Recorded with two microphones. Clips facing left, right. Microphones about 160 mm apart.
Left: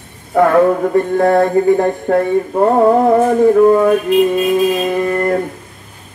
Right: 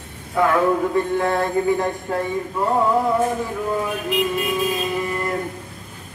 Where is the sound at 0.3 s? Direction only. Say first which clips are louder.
Left 7 dB; 50° left (ahead or behind); by 4.0 s 65° left (ahead or behind).